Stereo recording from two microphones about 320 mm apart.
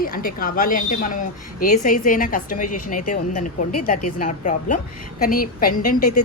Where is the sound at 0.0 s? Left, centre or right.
Left.